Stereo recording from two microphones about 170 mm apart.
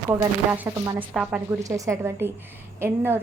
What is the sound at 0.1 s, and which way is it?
A woman's voice, 10° right (ahead or behind).